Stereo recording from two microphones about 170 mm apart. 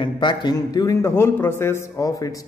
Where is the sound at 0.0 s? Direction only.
25° left (ahead or behind).